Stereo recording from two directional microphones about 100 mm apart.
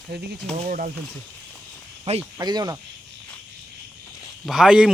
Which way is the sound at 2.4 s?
45° right (ahead or behind).